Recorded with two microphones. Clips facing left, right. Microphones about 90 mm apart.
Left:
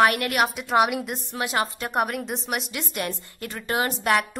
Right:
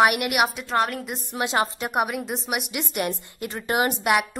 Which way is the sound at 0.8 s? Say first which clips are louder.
Left 3 dB; 10° left (ahead or behind).